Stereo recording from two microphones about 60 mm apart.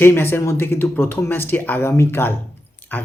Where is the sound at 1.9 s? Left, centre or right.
Left.